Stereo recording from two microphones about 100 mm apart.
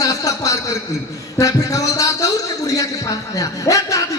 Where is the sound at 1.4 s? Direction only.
35° left (ahead or behind).